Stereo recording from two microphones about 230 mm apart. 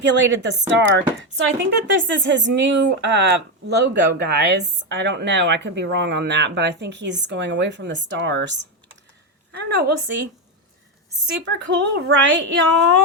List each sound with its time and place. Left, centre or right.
0.0 s a woman's voice: right
11.3 s a woman's voice: right